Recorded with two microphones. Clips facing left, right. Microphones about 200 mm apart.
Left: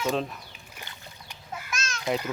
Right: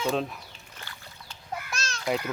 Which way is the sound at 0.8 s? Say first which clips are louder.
Left 1 dB; 15° left (ahead or behind).